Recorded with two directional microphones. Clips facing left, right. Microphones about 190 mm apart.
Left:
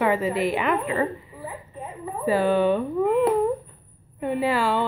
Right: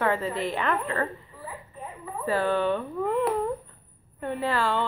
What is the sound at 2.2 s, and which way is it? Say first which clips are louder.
A woman's voice: left 5 dB; 15° left (ahead or behind).